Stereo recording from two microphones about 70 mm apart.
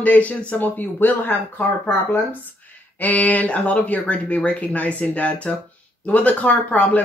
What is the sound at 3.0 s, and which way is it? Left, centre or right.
Speech, left.